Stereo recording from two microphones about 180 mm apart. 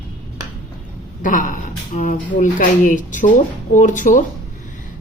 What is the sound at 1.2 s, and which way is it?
Speech, 45° left (ahead or behind).